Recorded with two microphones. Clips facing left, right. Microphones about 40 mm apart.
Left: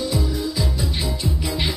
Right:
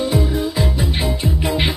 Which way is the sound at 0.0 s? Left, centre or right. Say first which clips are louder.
Right 5 dB; right.